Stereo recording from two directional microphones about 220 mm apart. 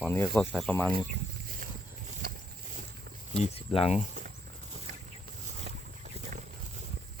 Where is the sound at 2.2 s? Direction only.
45° right (ahead or behind).